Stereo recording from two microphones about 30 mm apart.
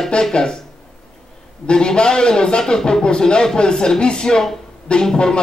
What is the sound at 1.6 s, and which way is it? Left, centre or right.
Speech, left.